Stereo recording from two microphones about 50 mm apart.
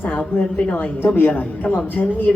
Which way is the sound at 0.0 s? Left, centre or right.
Left.